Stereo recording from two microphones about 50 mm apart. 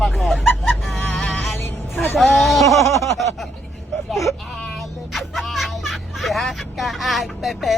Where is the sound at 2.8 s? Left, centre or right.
Left.